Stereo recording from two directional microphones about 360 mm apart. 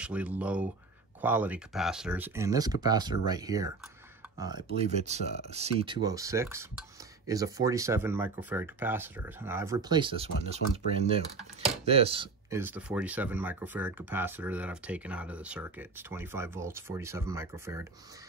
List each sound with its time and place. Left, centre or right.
0.0 s speech: centre